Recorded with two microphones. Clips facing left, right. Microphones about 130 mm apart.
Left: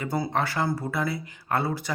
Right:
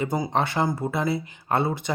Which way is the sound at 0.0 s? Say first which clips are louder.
Right 2 dB; 20° right (ahead or behind).